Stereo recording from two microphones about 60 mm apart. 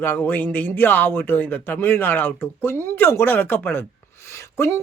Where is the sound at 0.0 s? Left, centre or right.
Left.